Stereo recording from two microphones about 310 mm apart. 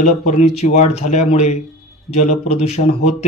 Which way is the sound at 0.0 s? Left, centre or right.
Left.